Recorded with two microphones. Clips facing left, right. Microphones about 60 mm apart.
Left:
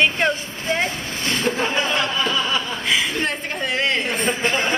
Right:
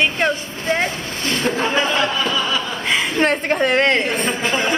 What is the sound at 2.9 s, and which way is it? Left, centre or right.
A woman's voice, right.